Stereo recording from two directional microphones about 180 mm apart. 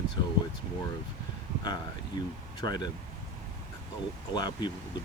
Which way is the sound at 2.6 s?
20° left (ahead or behind).